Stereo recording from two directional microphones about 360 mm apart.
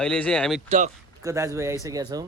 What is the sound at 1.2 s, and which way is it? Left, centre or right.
Speech, centre.